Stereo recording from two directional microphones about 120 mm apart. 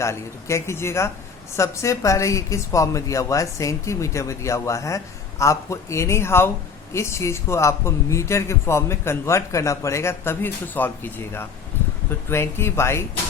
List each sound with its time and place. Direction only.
0.0 s a woman's voice: 25° left (ahead or behind)